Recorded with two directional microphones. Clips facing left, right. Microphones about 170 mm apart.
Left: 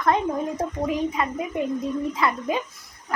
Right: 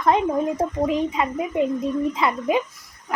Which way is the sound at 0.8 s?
20° right (ahead or behind).